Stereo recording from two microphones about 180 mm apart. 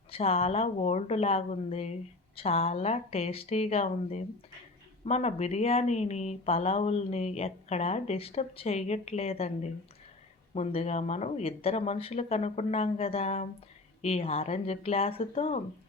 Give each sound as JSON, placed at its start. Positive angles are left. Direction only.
{"t": 0.1, "sound": "speech", "side_deg": 35}